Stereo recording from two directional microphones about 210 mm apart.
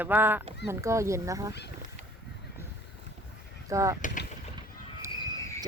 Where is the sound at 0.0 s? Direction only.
10° right (ahead or behind).